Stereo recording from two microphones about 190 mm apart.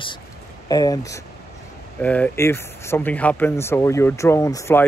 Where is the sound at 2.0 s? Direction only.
10° left (ahead or behind).